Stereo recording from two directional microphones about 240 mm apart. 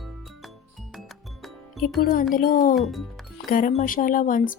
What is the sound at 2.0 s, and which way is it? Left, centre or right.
A woman's voice, left.